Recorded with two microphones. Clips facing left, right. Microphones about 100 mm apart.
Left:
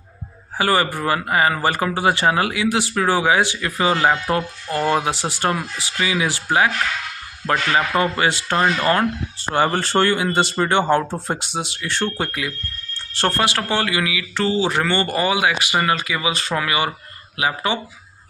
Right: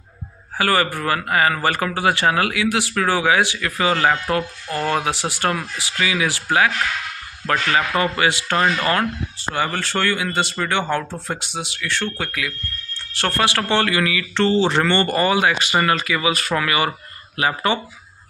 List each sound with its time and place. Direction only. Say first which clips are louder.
0.6 s speech: left 1 dB; 20° left (ahead or behind)
7.7 s speech: left 1 dB; 25° left (ahead or behind)
9.6 s speech: left 5 dB; 30° left (ahead or behind); by 17.7 s 10° left (ahead or behind)